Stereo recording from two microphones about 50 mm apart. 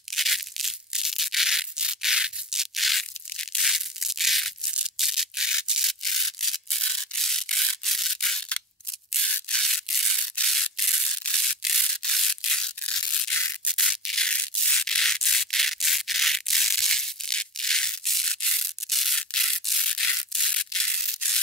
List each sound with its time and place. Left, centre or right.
0.1 s crushing: centre
4.9 s rub: centre
9.2 s a sound: centre
9.6 s crushing: centre
10.4 s sanding: centre
13.0 s crushing: centre
13.7 s rub: centre
18.9 s sanding: centre
19.1 s rub: centre
20.4 s a sound: centre